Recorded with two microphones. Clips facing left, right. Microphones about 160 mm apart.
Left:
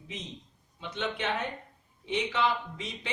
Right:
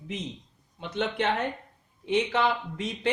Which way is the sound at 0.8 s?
50° right (ahead or behind).